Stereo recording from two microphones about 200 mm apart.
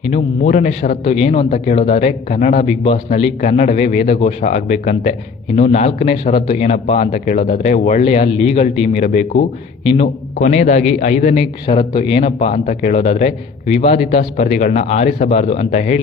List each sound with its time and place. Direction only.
0.1 s a man's voice: 35° left (ahead or behind)